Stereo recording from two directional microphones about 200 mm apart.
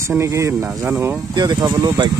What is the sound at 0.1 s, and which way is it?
Speech, 15° right (ahead or behind).